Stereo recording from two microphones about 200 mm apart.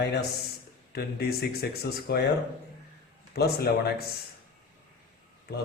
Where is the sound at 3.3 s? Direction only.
50° left (ahead or behind).